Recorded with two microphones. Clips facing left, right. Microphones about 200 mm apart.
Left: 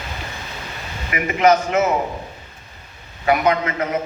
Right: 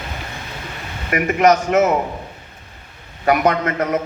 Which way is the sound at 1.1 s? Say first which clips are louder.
Right 1 dB; 50° right (ahead or behind).